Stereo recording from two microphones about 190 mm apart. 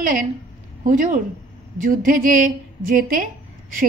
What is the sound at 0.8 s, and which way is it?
A woman's voice, 45° right (ahead or behind).